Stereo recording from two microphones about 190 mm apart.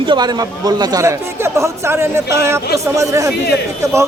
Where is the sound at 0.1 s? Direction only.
20° right (ahead or behind).